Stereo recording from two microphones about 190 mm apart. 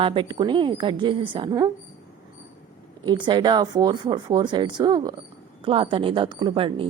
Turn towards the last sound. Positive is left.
turn(degrees=-30)  # may be behind; listen again after turning